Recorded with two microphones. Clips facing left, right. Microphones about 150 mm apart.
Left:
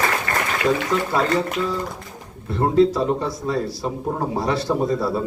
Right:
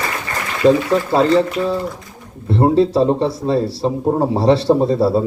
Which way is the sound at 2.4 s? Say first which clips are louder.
Right 3 dB; 30° right (ahead or behind).